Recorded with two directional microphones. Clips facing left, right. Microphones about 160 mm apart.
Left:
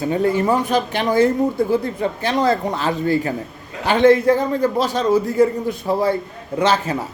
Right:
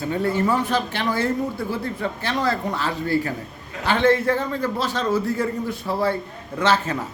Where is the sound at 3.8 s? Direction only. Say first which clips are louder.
Left 5 dB; 15° left (ahead or behind).